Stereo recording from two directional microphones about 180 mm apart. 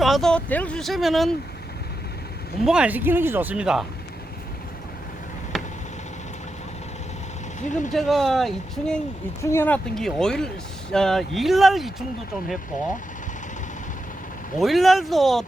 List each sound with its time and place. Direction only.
0.0 s speech: centre (ahead or behind)
2.6 s speech: 5° right (ahead or behind)
5.5 s a sound: centre (ahead or behind)
7.6 s speech: 45° left (ahead or behind)
7.9 s speech: centre (ahead or behind)
9.4 s speech: 15° left (ahead or behind)
14.6 s speech: centre (ahead or behind)